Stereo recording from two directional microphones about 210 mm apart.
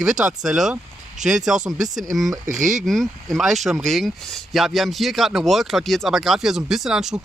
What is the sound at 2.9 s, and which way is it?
Speech, centre (ahead or behind).